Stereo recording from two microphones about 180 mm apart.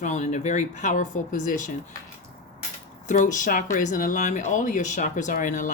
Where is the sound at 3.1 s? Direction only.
45° left (ahead or behind).